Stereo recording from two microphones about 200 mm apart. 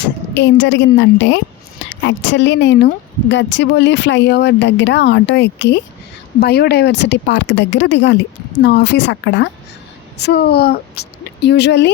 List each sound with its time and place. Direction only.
0.3 s speech: 65° left (ahead or behind)